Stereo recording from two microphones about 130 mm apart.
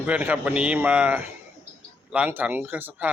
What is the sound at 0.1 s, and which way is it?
Speech, 10° right (ahead or behind).